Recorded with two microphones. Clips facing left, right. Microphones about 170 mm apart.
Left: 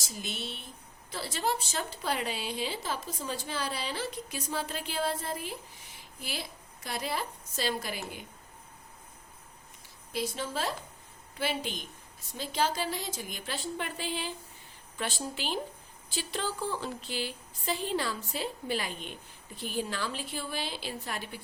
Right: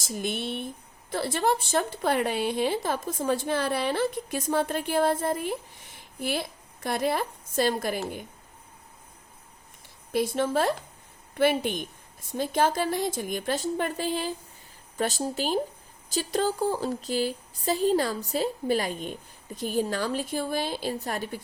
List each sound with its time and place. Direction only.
0.0 s a woman's voice: 55° right (ahead or behind)
10.1 s a woman's voice: 55° right (ahead or behind)